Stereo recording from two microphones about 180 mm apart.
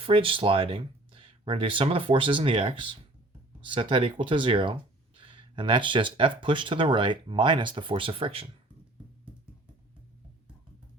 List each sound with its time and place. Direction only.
0.0 s speech: 30° right (ahead or behind)